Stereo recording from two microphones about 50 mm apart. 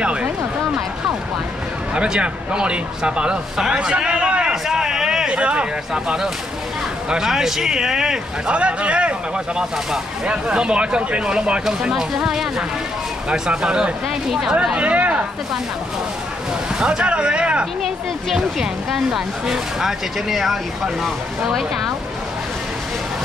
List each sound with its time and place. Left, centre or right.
0.0 s a sound: right
2.0 s a man's voice: centre
4.6 s a sound: centre
5.3 s speech: right
8.5 s speech: right
10.2 s speech: right
16.8 s speech: right
17.8 s speech: centre